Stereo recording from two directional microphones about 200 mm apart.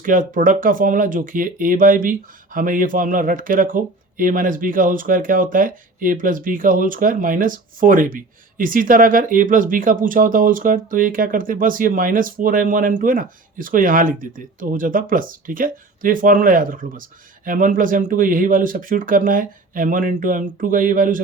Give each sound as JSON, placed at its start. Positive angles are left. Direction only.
{"t": 0.0, "sound": "speech", "side_deg": -40}